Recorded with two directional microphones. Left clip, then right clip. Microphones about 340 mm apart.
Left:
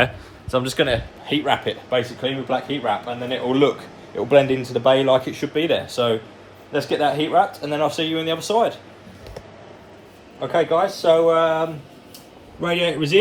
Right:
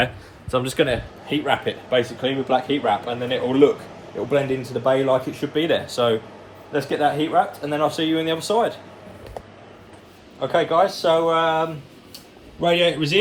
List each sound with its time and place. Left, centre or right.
0.5 s a man's voice: centre
4.9 s a man's voice: centre
10.4 s a man's voice: centre